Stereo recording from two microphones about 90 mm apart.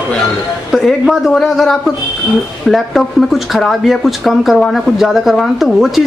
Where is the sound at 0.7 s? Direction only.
Centre (ahead or behind).